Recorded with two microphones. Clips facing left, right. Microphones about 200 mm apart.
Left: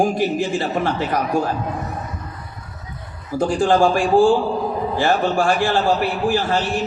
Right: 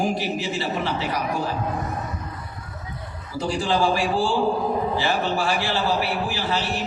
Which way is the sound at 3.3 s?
50° left (ahead or behind).